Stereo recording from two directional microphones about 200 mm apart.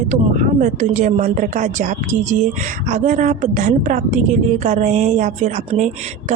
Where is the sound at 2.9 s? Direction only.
40° right (ahead or behind).